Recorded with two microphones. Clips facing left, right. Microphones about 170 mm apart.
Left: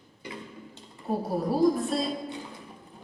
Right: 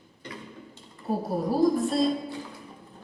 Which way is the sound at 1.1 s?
Centre (ahead or behind).